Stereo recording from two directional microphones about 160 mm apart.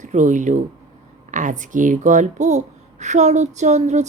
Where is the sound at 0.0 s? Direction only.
50° right (ahead or behind).